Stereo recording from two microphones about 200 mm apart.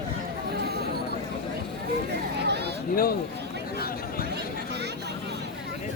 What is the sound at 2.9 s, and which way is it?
Speech, 45° left (ahead or behind).